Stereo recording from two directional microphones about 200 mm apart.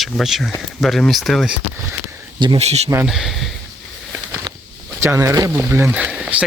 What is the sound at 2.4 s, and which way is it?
Speech, 25° right (ahead or behind).